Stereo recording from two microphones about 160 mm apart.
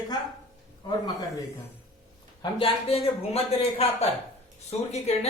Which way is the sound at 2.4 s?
35° left (ahead or behind).